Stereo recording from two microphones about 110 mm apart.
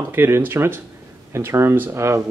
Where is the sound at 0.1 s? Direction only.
20° right (ahead or behind).